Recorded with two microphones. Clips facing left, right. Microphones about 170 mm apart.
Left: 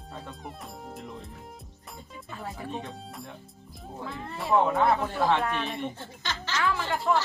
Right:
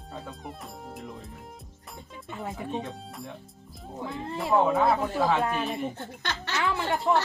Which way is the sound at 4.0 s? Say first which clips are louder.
Right 4 dB; 20° right (ahead or behind).